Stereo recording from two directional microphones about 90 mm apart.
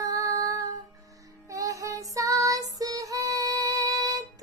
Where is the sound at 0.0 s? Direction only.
40° right (ahead or behind).